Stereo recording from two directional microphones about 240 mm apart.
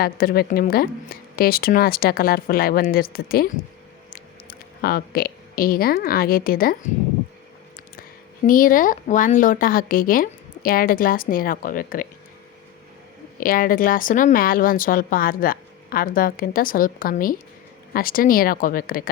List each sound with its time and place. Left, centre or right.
0.0 s a woman's voice: left
8.4 s a woman's voice: left
13.4 s a woman's voice: left